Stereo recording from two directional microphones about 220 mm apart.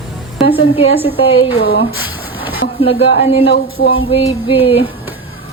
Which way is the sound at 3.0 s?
55° left (ahead or behind).